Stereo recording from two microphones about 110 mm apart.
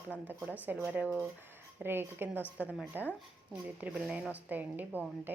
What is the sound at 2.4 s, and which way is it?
Speech, 20° left (ahead or behind).